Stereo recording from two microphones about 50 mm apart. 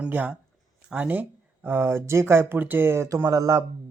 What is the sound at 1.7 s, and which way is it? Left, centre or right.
Speech, right.